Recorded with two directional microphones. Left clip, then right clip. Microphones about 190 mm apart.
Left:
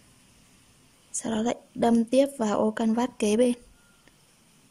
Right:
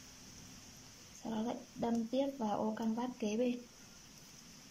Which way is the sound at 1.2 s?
65° left (ahead or behind).